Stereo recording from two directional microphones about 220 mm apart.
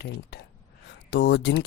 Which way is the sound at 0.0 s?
50° left (ahead or behind).